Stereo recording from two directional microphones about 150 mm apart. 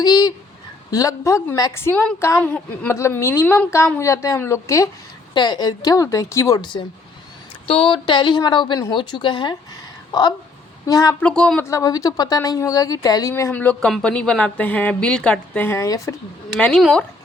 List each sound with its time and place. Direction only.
0.0 s a woman's voice: 25° left (ahead or behind)
7.7 s a woman's voice: 40° left (ahead or behind)
10.1 s a sound: 25° left (ahead or behind)
10.8 s speech: 25° left (ahead or behind)
11.2 s a woman's voice: 5° left (ahead or behind)
11.7 s a woman's voice: 20° left (ahead or behind)
16.6 s a woman's voice: 5° left (ahead or behind)